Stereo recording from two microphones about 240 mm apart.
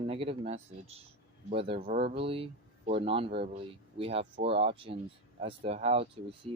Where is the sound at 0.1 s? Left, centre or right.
Right.